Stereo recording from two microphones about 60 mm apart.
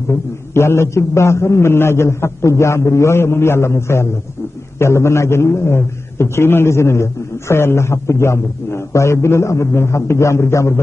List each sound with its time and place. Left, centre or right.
0.1 s a man's voice: left